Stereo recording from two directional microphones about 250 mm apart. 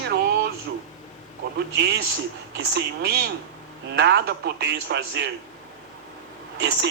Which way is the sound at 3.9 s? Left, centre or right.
Right.